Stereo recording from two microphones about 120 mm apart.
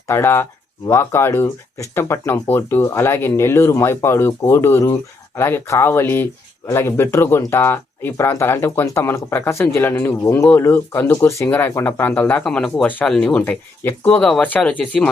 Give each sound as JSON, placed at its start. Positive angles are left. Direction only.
{"t": 0.1, "sound": "speech", "side_deg": 20}